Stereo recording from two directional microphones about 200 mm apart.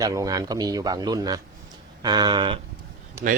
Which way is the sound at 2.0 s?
20° right (ahead or behind).